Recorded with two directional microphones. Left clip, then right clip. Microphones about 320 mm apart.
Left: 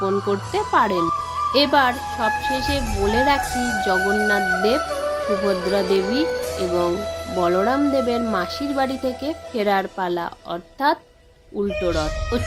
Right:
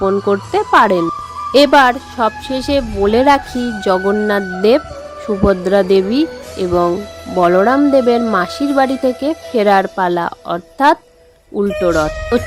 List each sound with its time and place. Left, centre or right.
0.0 s speech: right